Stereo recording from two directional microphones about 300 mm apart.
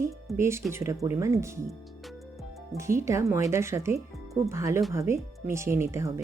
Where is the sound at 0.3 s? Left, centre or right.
Centre.